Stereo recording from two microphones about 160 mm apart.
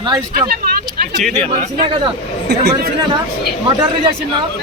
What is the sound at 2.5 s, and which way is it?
Speech, 90° right.